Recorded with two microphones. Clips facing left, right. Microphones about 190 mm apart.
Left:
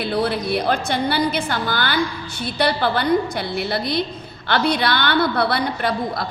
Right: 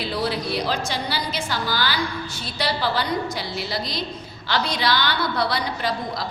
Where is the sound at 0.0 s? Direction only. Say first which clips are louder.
Left 4 dB; 55° left (ahead or behind).